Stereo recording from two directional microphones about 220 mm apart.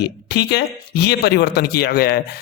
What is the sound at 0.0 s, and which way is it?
A man's voice, 50° left (ahead or behind).